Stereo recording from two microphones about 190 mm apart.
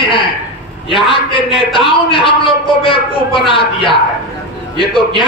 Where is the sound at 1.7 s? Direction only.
25° left (ahead or behind).